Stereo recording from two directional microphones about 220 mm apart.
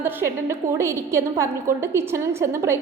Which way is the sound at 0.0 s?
10° right (ahead or behind).